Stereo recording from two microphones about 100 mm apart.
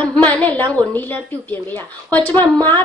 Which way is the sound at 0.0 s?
15° left (ahead or behind).